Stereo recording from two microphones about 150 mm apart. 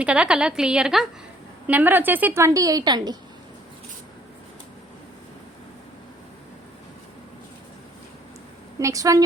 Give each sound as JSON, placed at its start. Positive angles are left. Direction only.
{"t": 0.0, "sound": "a woman's voice", "side_deg": -5}
{"t": 8.8, "sound": "a woman's voice", "side_deg": -20}